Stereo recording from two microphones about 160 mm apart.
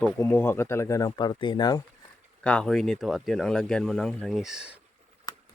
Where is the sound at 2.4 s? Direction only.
5° left (ahead or behind).